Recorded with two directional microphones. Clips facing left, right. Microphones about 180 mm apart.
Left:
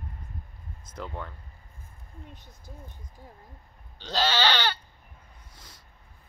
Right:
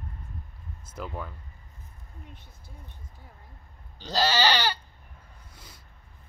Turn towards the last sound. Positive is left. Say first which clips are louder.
# right 1 dB
turn(degrees=-10)  # may be behind; listen again after turning